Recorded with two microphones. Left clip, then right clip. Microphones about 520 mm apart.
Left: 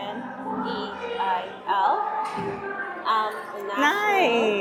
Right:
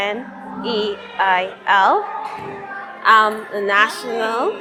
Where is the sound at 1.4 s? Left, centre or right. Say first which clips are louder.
Right 9 dB; right.